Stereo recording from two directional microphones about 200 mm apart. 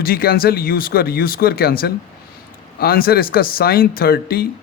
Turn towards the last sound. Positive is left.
turn(degrees=50)  # may be behind; listen again after turning